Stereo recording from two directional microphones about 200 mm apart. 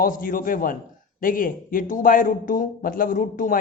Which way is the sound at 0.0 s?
45° left (ahead or behind).